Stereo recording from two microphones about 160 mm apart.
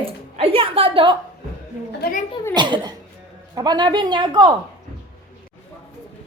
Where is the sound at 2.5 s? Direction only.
30° right (ahead or behind).